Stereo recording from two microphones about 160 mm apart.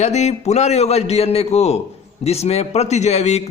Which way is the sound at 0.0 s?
45° left (ahead or behind).